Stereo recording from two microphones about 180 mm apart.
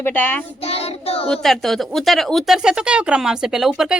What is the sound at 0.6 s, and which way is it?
Child singing, 35° left (ahead or behind).